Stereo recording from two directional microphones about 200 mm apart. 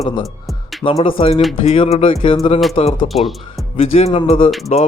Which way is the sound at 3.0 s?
Centre (ahead or behind).